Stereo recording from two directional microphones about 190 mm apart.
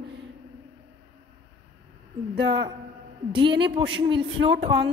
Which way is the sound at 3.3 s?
25° right (ahead or behind).